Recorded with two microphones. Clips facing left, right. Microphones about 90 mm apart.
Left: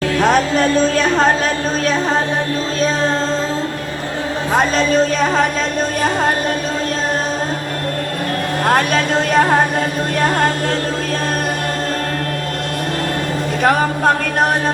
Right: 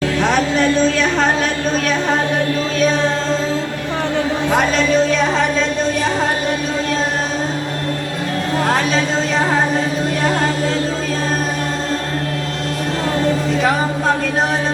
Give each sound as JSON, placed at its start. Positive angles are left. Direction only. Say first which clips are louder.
{"t": 0.2, "sound": "a sound", "louder": "left 3 dB", "side_deg": 45}
{"t": 2.7, "sound": "music", "louder": "right 1 dB", "side_deg": 35}
{"t": 4.5, "sound": "speech", "louder": "left 1 dB", "side_deg": 40}
{"t": 8.6, "sound": "speech", "louder": "left 3 dB", "side_deg": 50}
{"t": 13.6, "sound": "speech", "louder": "left 2 dB", "side_deg": 55}